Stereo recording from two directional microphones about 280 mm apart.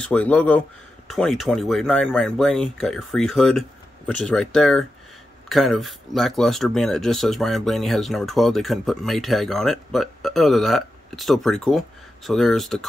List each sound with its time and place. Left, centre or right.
0.0 s speech: centre